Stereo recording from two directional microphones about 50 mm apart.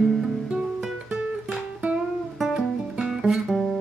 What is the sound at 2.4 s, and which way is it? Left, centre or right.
Music, centre.